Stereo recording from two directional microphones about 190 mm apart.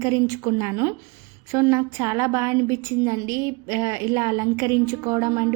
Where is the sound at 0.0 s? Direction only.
15° right (ahead or behind).